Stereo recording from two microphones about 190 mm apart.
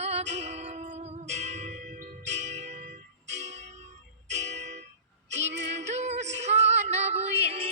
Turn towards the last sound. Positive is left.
turn(degrees=-30)  # may be behind; listen again after turning